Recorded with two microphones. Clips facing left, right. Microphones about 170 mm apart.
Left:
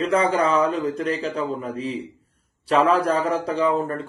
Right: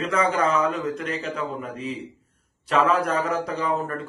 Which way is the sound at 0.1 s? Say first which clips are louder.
Left 2 dB; 35° left (ahead or behind).